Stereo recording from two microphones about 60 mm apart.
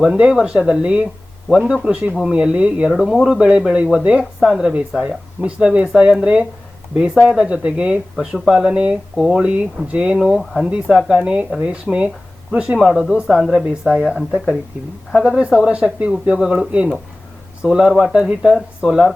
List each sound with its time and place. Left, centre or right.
0.0 s speech: centre
2.9 s speech: centre
5.0 s speech: right
9.1 s speech: centre
9.4 s speech: centre
10.2 s speech: centre
12.8 s speech: centre